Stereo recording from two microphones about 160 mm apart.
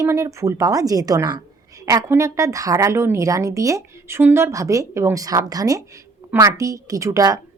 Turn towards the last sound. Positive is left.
turn(degrees=-20)  # may be behind; listen again after turning